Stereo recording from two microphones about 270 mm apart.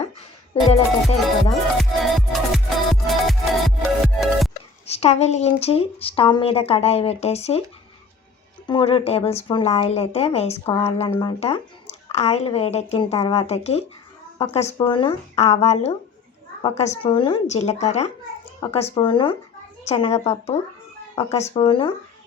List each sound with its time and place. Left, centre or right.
0.5 s speech: left
1.8 s music: centre
4.9 s speech: left
8.6 s speech: centre